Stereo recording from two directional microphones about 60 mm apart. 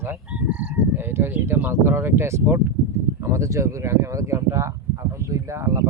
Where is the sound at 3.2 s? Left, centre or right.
Right.